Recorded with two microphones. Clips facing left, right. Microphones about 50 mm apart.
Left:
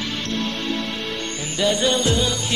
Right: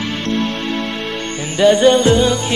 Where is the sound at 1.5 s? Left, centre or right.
Right.